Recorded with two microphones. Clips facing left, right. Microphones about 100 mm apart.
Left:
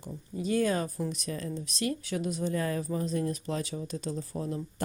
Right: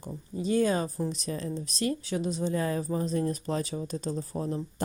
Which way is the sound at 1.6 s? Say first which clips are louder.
Right 2 dB; 35° right (ahead or behind).